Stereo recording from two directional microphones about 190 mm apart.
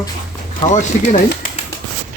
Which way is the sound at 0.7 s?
40° left (ahead or behind).